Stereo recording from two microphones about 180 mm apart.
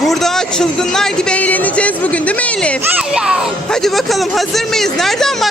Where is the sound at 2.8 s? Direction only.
5° right (ahead or behind).